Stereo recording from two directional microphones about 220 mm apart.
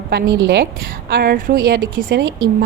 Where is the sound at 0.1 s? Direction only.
50° right (ahead or behind).